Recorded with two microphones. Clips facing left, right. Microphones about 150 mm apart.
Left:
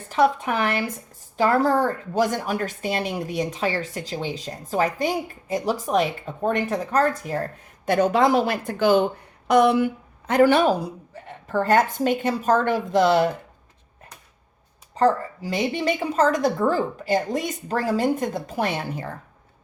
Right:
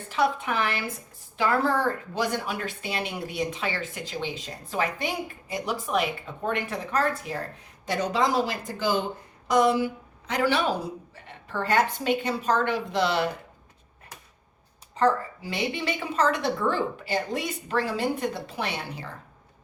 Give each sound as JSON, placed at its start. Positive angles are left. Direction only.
{"t": 0.1, "sound": "speech", "side_deg": 40}
{"t": 7.9, "sound": "a woman's voice", "side_deg": 55}
{"t": 14.9, "sound": "a woman's voice", "side_deg": 40}